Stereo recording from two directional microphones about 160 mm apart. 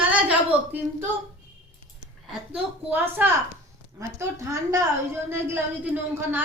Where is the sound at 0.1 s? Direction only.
10° right (ahead or behind).